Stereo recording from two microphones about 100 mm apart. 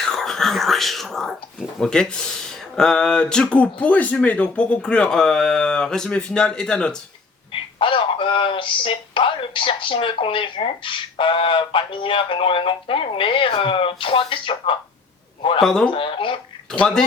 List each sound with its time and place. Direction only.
0.0 s speech: 5° left (ahead or behind)
7.5 s speech: 60° left (ahead or behind)
15.6 s speech: 5° left (ahead or behind)
15.9 s speech: 60° left (ahead or behind)
16.7 s speech: 5° left (ahead or behind)